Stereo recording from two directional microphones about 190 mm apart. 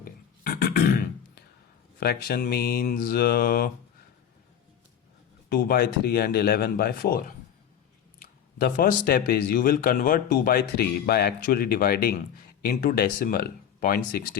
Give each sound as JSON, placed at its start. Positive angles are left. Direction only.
{"t": 0.0, "sound": "beatboxing", "side_deg": 50}
{"t": 2.0, "sound": "speech", "side_deg": 50}
{"t": 5.5, "sound": "speech", "side_deg": 50}